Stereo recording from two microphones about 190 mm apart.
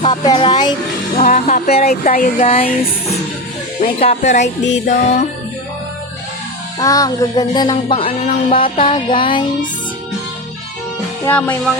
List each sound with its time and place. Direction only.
0.0 s speech: 25° left (ahead or behind)
1.2 s music: 40° left (ahead or behind)
3.8 s music: 35° left (ahead or behind)
6.7 s music: 20° left (ahead or behind)
11.3 s music: 10° left (ahead or behind)